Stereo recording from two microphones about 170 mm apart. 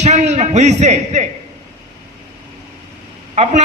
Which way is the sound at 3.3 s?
40° right (ahead or behind).